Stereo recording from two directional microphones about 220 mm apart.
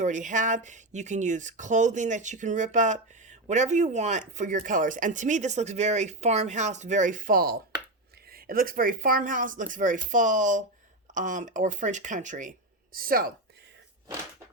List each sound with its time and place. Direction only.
0.0 s speech: 35° right (ahead or behind)